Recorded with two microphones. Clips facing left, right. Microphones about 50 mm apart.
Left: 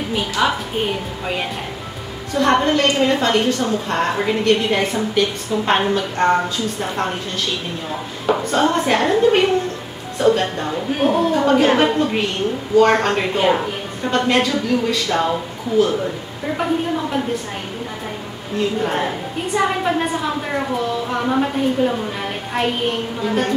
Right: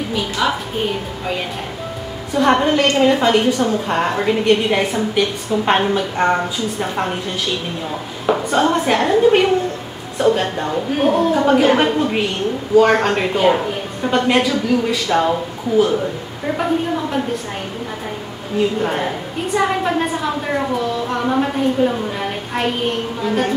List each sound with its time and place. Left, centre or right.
0.4 s a woman's voice: centre
2.3 s a woman's voice: centre
8.3 s a woman's voice: centre
16.5 s a woman's voice: centre
18.6 s a woman's voice: centre
23.2 s a woman's voice: centre